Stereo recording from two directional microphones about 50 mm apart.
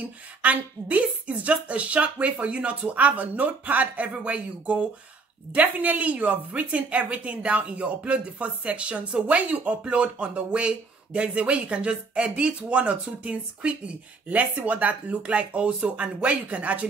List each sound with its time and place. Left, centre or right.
0.0 s speech: right